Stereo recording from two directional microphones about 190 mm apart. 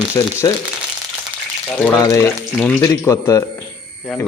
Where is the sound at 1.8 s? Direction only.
15° left (ahead or behind).